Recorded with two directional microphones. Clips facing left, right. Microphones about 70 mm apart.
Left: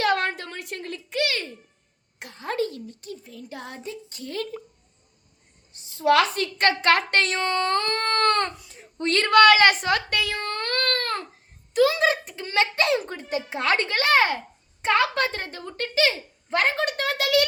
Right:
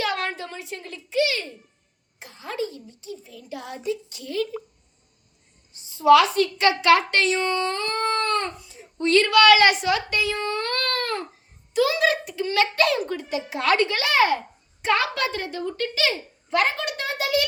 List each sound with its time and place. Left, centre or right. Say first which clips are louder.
0.0 s a sound: left 3 dB; left
2.1 s speech: left 3 dB; left
5.9 s speech: right 4 dB; left
9.0 s speech: even; left
11.7 s a woman's voice: left 1 dB; left
17.1 s a child's voice: left 1 dB; left